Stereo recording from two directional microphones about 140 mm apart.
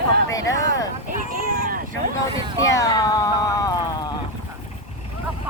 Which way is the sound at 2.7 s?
25° left (ahead or behind).